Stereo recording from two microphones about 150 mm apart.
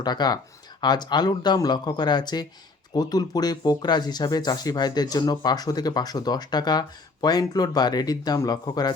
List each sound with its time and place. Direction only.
0.0 s speech: 30° left (ahead or behind)